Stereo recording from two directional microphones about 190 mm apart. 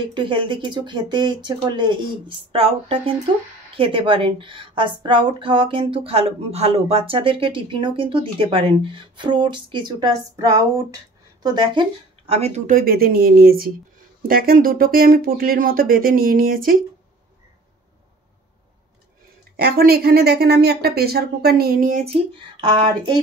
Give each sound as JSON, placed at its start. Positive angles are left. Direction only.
{"t": 0.1, "sound": "a woman's voice", "side_deg": -25}
{"t": 19.5, "sound": "a woman's voice", "side_deg": -55}